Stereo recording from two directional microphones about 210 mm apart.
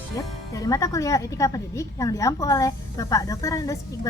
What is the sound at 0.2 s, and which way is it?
Speech, 15° left (ahead or behind).